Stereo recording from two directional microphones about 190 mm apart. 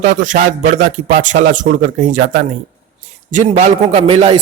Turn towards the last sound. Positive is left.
turn(degrees=-30)  # may be behind; listen again after turning